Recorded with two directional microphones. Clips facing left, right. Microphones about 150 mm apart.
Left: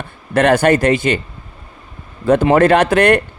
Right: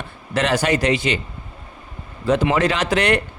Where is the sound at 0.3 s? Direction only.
55° left (ahead or behind).